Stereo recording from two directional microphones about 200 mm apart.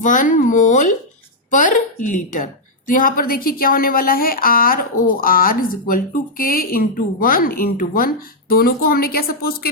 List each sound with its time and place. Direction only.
0.0 s a woman's voice: 40° left (ahead or behind)